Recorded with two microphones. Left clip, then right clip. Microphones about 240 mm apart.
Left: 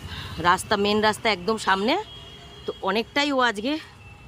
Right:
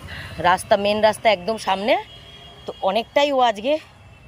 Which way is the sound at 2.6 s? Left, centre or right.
Left.